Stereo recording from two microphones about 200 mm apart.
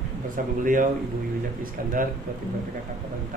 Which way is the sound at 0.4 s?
45° right (ahead or behind).